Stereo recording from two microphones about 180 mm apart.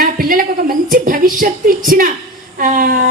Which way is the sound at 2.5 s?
50° right (ahead or behind).